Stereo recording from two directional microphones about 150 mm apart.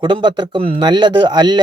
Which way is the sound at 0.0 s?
30° right (ahead or behind).